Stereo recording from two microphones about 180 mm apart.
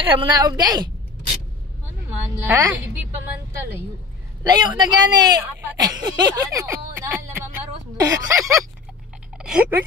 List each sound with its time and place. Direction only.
0.0 s speech: 30° right (ahead or behind)
2.4 s speech: 15° right (ahead or behind)
4.4 s speech: 25° right (ahead or behind)
8.0 s speech: 15° right (ahead or behind)
9.4 s speech: 5° right (ahead or behind)